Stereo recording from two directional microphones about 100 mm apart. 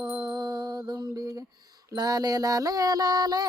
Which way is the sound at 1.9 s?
40° right (ahead or behind).